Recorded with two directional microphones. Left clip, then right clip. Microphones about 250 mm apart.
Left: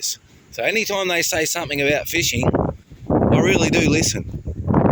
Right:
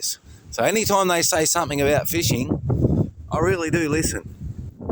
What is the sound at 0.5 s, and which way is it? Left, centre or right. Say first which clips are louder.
Speech: right 1 dB; centre.